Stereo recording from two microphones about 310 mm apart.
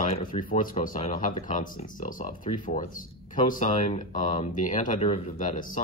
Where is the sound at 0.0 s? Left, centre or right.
Left.